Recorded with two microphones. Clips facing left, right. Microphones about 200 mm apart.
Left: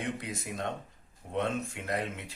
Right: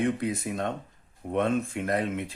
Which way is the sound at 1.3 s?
55° right (ahead or behind).